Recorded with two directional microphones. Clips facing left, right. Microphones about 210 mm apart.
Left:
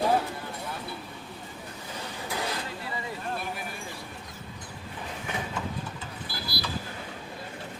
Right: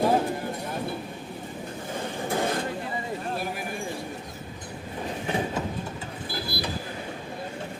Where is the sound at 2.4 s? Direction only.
50° right (ahead or behind).